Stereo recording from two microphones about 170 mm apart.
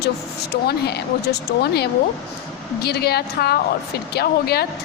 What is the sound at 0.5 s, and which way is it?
A woman's voice, 70° left (ahead or behind).